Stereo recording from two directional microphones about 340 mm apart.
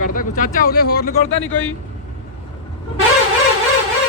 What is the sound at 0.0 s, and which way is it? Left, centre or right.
Speech, left.